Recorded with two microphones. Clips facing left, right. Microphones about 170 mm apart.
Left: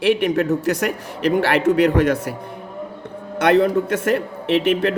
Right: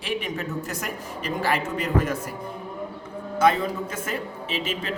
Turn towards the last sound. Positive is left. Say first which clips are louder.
# left 12 dB
turn(degrees=65)  # may be behind; listen again after turning